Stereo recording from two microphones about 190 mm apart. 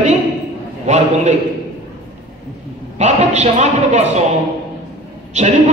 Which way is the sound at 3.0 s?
35° right (ahead or behind).